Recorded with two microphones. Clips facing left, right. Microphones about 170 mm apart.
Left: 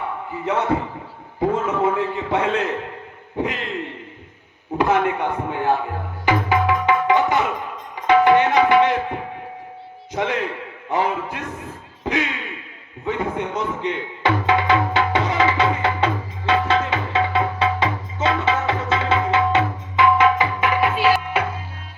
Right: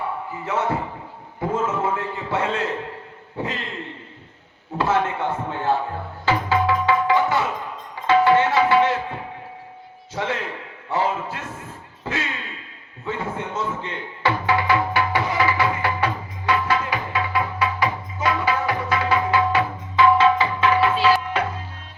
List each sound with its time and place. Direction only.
0.4 s speech: 20° left (ahead or behind)
1.4 s a sound: 20° left (ahead or behind)
6.2 s music: 15° left (ahead or behind)
10.1 s a sound: 15° left (ahead or behind)
12.0 s throat clearing: 20° left (ahead or behind)
13.1 s music: 20° left (ahead or behind)